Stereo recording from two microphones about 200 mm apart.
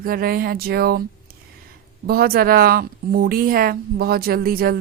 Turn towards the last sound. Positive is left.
turn(degrees=-50)  # may be behind; listen again after turning